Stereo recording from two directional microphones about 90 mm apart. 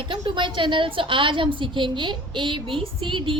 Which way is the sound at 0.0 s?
60° right (ahead or behind).